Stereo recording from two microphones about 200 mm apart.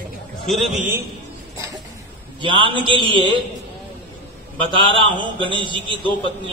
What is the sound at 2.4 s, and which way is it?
Speech, 25° right (ahead or behind).